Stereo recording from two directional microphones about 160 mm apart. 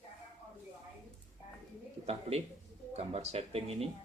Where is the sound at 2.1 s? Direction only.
40° right (ahead or behind).